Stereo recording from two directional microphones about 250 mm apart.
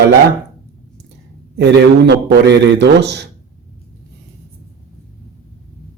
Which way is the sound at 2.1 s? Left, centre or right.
Right.